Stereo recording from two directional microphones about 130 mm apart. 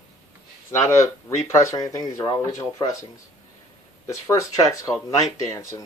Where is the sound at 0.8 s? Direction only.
25° left (ahead or behind).